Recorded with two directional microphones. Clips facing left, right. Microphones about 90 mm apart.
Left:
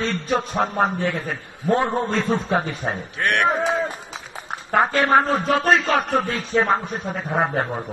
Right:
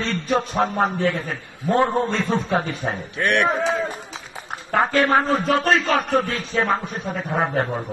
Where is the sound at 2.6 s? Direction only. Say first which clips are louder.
Even; centre (ahead or behind).